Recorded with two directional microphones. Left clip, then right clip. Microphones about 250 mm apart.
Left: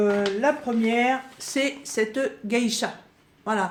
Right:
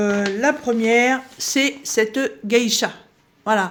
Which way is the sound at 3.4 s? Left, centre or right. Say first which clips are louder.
Right 7 dB; right.